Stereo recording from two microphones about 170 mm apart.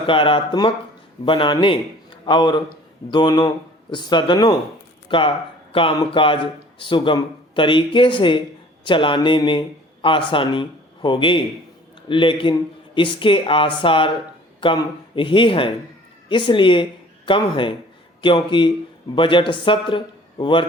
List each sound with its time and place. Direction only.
0.0 s speech: 30° left (ahead or behind)